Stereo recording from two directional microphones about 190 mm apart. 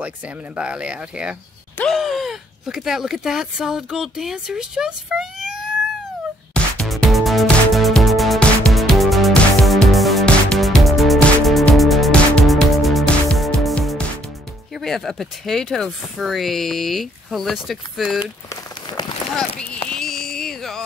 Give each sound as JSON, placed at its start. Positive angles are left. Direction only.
{"t": 0.6, "sound": "speech", "side_deg": -5}
{"t": 6.5, "sound": "music", "side_deg": 5}
{"t": 14.7, "sound": "speech", "side_deg": 0}
{"t": 18.2, "sound": "rain on surface", "side_deg": 20}
{"t": 19.3, "sound": "run", "side_deg": 5}
{"t": 19.9, "sound": "a sound", "side_deg": 0}